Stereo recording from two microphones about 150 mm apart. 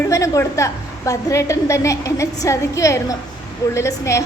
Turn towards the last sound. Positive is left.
turn(degrees=20)  # may be behind; listen again after turning